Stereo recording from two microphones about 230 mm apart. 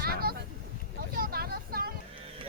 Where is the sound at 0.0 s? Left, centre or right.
Right.